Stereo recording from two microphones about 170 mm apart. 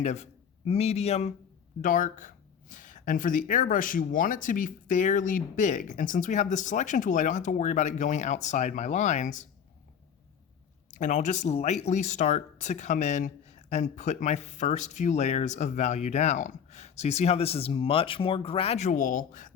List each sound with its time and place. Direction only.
0.0 s a man's voice: 40° left (ahead or behind)
1.8 s speech: 50° left (ahead or behind)
10.9 s speech: 45° left (ahead or behind)